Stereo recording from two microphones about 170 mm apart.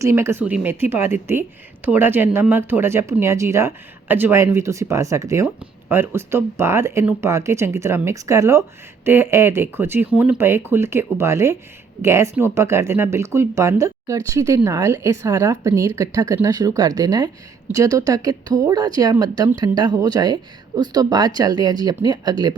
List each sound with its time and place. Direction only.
0.0 s a woman's voice: 15° right (ahead or behind)